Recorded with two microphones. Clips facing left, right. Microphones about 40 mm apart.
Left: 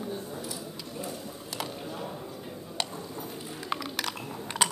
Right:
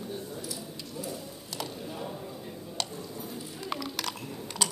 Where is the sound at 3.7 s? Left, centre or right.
Centre.